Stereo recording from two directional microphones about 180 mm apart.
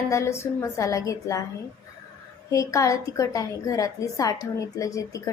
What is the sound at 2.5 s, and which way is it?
A woman's voice, 15° left (ahead or behind).